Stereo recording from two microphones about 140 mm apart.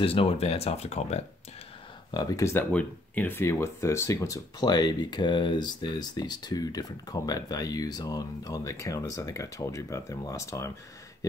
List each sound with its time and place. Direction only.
0.0 s speech: 40° left (ahead or behind)
2.0 s speech: 25° left (ahead or behind)
2.7 s speech: 10° left (ahead or behind)